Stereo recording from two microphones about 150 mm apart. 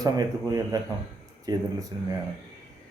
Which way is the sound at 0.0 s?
25° right (ahead or behind).